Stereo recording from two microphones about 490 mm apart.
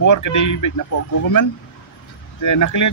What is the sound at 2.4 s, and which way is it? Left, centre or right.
Speech, left.